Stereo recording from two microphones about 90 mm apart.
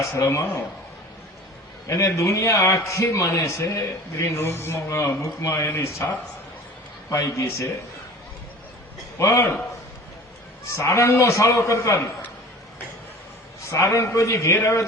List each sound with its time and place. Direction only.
0.0 s a man's voice: 30° left (ahead or behind)
1.9 s a man's voice: 35° left (ahead or behind)
9.1 s a man's voice: 30° left (ahead or behind)
10.8 s a man's voice: 35° left (ahead or behind)
13.7 s a man's voice: 35° left (ahead or behind)